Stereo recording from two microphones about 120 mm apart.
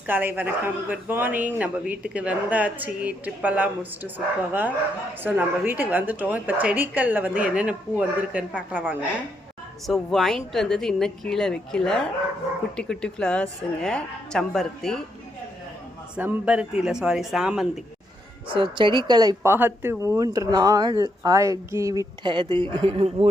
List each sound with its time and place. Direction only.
0.1 s a man's voice: 15° right (ahead or behind)
5.2 s a man's voice: 15° right (ahead or behind)
9.8 s a woman's voice: centre (ahead or behind)
16.1 s a woman's voice: 10° right (ahead or behind)
18.4 s speech: 45° right (ahead or behind)
19.4 s speech: 20° right (ahead or behind)
22.2 s speech: 40° right (ahead or behind)